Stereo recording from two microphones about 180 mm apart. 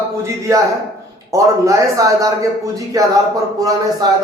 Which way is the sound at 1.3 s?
15° right (ahead or behind).